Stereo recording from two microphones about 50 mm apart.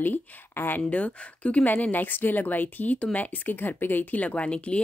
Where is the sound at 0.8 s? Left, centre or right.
Left.